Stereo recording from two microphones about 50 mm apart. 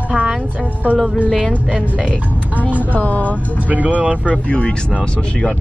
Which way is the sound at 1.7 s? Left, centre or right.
Right.